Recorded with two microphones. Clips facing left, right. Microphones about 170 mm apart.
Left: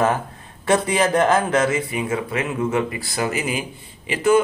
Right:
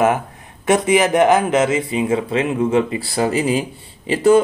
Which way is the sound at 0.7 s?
15° right (ahead or behind).